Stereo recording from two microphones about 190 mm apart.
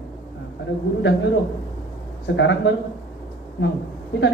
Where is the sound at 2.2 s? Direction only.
70° left (ahead or behind).